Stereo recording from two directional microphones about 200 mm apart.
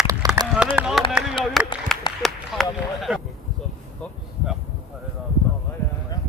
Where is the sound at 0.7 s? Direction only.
Centre (ahead or behind).